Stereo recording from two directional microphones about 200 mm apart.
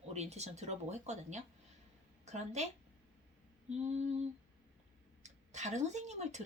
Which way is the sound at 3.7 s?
35° right (ahead or behind).